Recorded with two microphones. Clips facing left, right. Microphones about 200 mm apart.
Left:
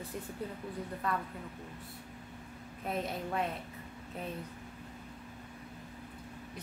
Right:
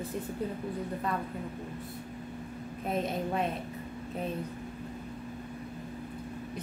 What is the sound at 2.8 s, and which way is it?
Speech, 20° right (ahead or behind).